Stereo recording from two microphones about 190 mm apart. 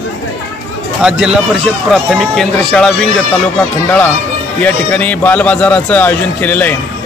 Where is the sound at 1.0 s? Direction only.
5° right (ahead or behind).